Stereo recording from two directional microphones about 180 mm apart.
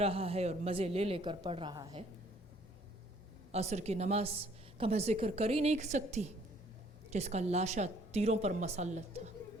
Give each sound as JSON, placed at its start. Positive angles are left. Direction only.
{"t": 0.0, "sound": "a woman's voice", "side_deg": -35}
{"t": 3.5, "sound": "a woman's voice", "side_deg": -40}